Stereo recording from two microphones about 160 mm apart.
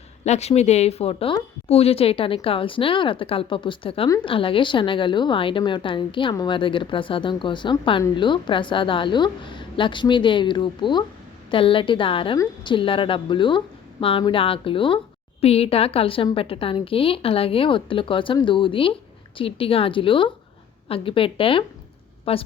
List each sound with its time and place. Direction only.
0.3 s a woman's voice: 45° left (ahead or behind)